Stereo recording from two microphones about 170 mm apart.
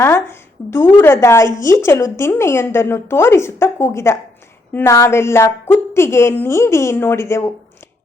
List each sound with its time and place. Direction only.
0.0 s a woman's voice: 15° left (ahead or behind)